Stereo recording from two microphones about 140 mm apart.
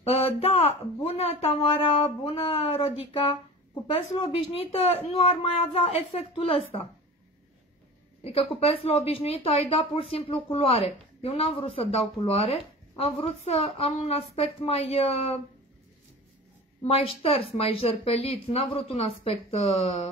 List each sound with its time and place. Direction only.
0.0 s a woman's voice: 45° left (ahead or behind)
8.2 s a woman's voice: 45° left (ahead or behind)
16.8 s a woman's voice: 45° left (ahead or behind)